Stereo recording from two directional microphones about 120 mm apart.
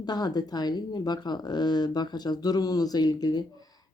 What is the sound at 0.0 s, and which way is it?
Speech, 35° left (ahead or behind).